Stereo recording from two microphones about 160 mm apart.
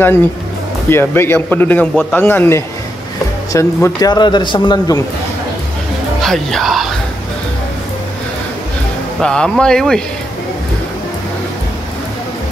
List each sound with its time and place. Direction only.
0.8 s a man's voice: 15° left (ahead or behind)
6.2 s a man's voice: centre (ahead or behind)
9.2 s a man's voice: 5° left (ahead or behind)